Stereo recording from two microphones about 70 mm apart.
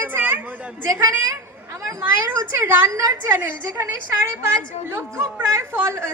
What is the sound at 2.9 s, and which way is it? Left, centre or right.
Speech, right.